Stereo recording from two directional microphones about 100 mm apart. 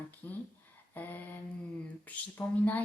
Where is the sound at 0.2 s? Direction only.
20° left (ahead or behind).